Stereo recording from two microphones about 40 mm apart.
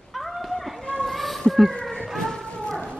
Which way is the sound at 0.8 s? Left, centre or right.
Left.